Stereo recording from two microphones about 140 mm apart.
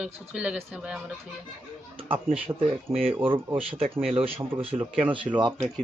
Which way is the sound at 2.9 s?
Centre (ahead or behind).